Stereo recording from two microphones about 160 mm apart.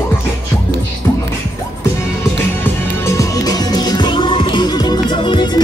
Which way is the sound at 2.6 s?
15° left (ahead or behind).